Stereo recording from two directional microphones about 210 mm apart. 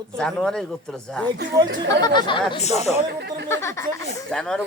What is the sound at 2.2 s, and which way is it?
Speech, 25° left (ahead or behind).